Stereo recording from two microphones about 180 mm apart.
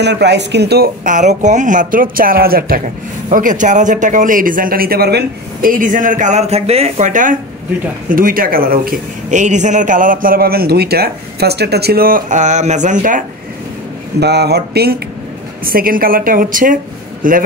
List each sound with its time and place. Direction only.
0.0 s speech: 70° right (ahead or behind)
3.3 s speech: 45° right (ahead or behind)
14.2 s speech: 65° right (ahead or behind); by 17.4 s 50° right (ahead or behind)